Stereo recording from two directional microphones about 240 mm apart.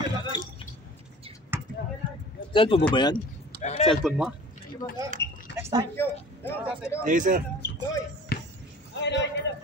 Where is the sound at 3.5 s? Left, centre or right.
Left.